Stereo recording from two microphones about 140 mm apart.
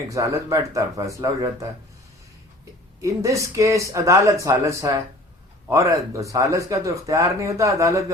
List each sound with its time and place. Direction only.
0.1 s speech: 20° right (ahead or behind)
3.0 s speech: 20° right (ahead or behind)